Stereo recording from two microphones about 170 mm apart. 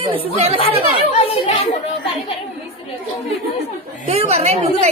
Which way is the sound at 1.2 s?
35° left (ahead or behind).